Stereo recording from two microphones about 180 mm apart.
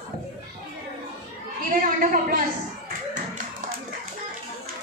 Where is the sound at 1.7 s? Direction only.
50° right (ahead or behind).